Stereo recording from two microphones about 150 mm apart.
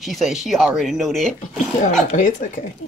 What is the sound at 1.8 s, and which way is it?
Speech, 60° left (ahead or behind).